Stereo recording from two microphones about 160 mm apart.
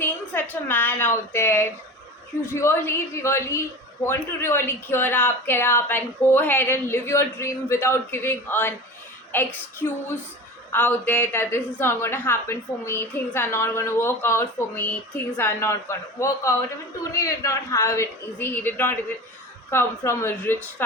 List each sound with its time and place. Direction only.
0.0 s a woman's voice: 10° left (ahead or behind)
10.7 s a woman's voice: 10° left (ahead or behind)